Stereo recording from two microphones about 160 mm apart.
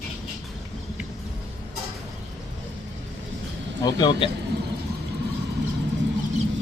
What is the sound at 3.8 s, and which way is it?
Speech, 25° left (ahead or behind).